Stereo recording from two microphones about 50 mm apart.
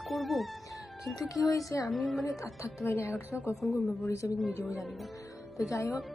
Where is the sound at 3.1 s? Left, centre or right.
Left.